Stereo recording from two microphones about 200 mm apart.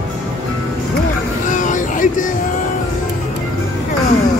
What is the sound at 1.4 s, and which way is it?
Vehicle, 40° left (ahead or behind).